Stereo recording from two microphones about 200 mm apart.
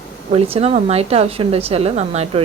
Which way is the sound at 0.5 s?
30° right (ahead or behind).